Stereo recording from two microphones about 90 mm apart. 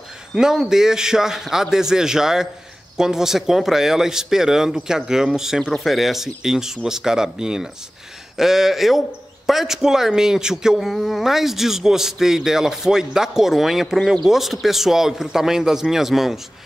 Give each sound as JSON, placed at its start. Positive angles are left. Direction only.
{"t": 0.3, "sound": "speech", "side_deg": -5}